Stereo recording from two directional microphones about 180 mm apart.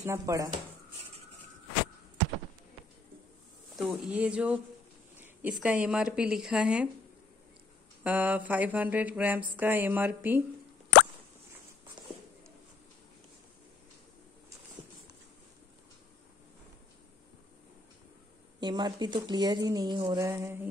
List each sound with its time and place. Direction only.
0.0 s mantra: 15° right (ahead or behind)
3.7 s mantra: centre (ahead or behind)
5.2 s speech: 10° right (ahead or behind)
8.0 s mantra: 10° right (ahead or behind)
18.6 s speech: 25° right (ahead or behind)